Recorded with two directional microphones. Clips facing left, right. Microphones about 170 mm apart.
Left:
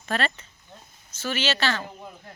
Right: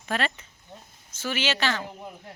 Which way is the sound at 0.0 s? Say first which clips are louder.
Left 1 dB; 10° right (ahead or behind).